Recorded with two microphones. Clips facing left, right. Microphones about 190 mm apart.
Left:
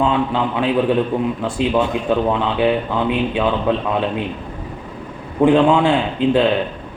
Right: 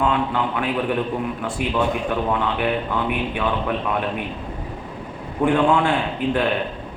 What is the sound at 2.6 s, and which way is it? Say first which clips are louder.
Speech: left 5 dB; 20° left (ahead or behind).